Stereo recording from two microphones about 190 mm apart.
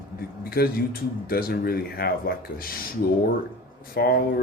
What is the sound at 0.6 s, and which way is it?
Speech, 50° left (ahead or behind).